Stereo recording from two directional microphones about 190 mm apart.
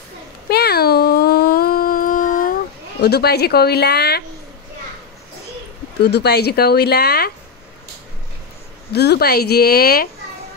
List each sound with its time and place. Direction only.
0.5 s a sound: 55° left (ahead or behind)
3.0 s speech: 60° left (ahead or behind)
6.0 s speech: 60° left (ahead or behind)
8.9 s speech: 60° left (ahead or behind)